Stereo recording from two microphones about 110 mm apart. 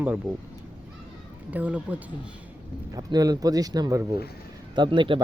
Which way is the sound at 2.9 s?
35° right (ahead or behind).